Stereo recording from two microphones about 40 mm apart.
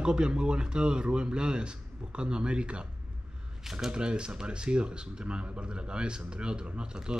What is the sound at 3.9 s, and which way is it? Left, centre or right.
Speech, right.